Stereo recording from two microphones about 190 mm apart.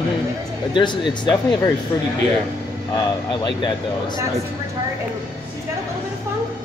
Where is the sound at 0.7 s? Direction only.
25° left (ahead or behind).